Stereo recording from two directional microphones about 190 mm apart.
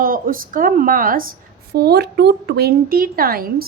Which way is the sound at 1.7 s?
60° right (ahead or behind).